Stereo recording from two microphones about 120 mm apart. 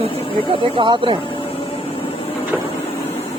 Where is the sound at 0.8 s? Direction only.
45° right (ahead or behind).